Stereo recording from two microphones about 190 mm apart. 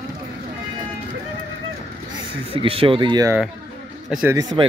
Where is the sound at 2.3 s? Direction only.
30° right (ahead or behind).